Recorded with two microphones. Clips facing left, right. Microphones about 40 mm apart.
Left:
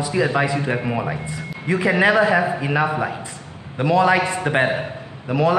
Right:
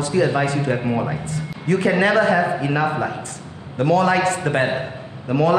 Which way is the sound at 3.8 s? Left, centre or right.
Left.